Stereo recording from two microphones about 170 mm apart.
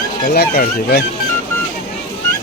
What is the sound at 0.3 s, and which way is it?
Speech, 65° left (ahead or behind).